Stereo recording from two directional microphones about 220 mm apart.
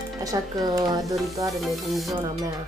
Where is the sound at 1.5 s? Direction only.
Centre (ahead or behind).